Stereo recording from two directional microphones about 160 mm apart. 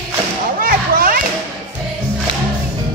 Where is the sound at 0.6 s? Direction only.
60° right (ahead or behind).